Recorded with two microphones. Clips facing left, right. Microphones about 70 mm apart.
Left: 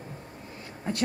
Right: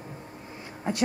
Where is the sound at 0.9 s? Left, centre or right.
Centre.